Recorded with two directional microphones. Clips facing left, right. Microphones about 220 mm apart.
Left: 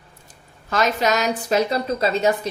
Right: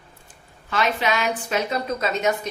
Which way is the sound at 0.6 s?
40° left (ahead or behind).